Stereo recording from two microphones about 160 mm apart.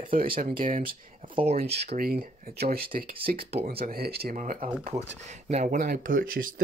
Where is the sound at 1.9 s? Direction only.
70° right (ahead or behind).